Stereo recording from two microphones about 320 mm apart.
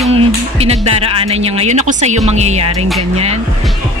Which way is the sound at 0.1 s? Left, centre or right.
Centre.